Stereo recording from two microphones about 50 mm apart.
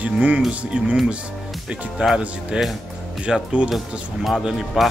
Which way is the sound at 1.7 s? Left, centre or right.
Centre.